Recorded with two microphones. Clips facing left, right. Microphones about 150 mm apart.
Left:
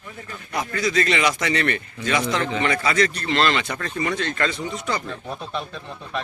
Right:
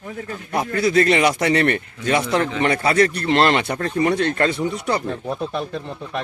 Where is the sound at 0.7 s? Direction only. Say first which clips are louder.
Right 6 dB; 60° right (ahead or behind).